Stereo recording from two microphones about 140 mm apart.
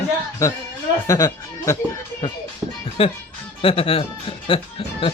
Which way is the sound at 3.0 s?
40° left (ahead or behind).